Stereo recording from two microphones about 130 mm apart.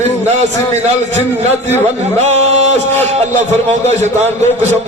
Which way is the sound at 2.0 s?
55° right (ahead or behind).